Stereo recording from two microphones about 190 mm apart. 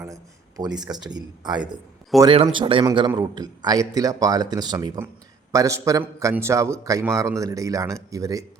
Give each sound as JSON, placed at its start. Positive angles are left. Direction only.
{"t": 0.0, "sound": "a man's voice", "side_deg": -20}